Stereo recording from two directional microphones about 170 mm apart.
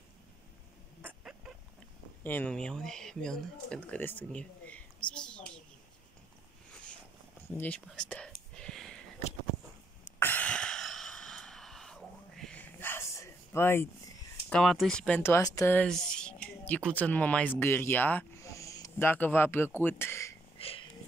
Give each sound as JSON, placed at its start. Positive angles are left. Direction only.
{"t": 1.0, "sound": "duck", "side_deg": -5}
{"t": 2.2, "sound": "speech", "side_deg": 10}
{"t": 7.5, "sound": "speech", "side_deg": 10}
{"t": 7.8, "sound": "whispering", "side_deg": 5}
{"t": 10.1, "sound": "a sound", "side_deg": 10}
{"t": 14.5, "sound": "speech", "side_deg": 0}
{"t": 20.5, "sound": "a sound", "side_deg": 30}